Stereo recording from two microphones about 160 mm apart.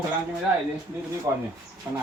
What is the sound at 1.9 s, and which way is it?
Speech, 15° right (ahead or behind).